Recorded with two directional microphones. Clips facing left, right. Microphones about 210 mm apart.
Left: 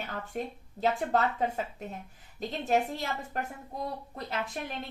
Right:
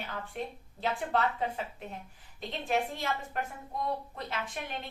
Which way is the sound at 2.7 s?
40° left (ahead or behind).